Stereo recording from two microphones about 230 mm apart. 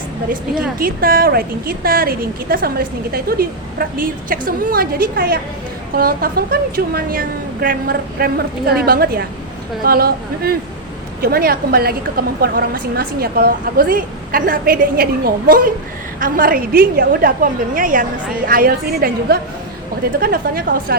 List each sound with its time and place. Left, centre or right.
0.8 s a woman's voice: right